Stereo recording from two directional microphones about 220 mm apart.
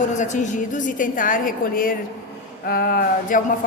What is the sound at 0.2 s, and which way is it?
A woman's voice, 35° left (ahead or behind).